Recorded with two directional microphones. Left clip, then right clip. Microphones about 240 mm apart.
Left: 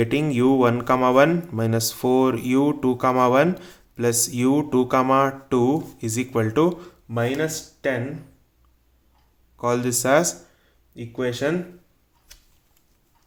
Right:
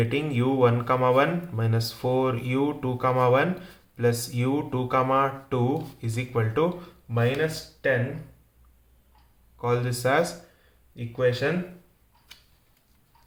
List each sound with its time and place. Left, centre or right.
0.0 s speech: left
9.6 s speech: left